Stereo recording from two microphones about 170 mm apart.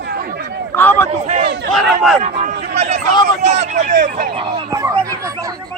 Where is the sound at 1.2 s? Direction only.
40° right (ahead or behind).